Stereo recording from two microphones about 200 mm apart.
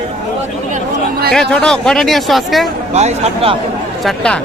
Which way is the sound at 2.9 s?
30° right (ahead or behind).